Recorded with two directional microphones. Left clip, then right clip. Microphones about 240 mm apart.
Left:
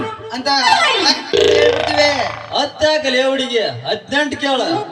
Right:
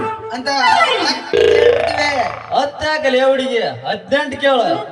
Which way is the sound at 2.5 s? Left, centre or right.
Right.